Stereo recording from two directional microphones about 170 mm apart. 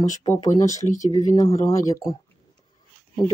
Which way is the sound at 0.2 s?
20° left (ahead or behind).